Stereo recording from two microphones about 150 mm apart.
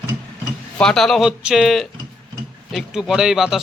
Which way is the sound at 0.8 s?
5° left (ahead or behind).